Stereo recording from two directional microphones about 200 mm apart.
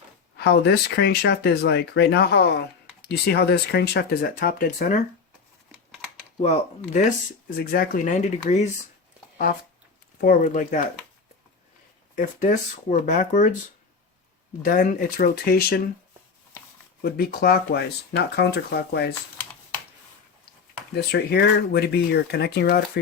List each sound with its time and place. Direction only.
0.3 s speech: 55° left (ahead or behind)
6.4 s speech: 35° left (ahead or behind)
7.5 s speech: 45° left (ahead or behind)
10.2 s speech: 45° left (ahead or behind)
12.1 s speech: 40° left (ahead or behind)
14.6 s speech: 45° left (ahead or behind)
17.0 s speech: 50° left (ahead or behind)
20.9 s speech: 55° left (ahead or behind)